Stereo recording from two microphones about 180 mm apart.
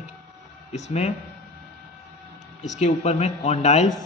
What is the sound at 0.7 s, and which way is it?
Speech, 40° left (ahead or behind).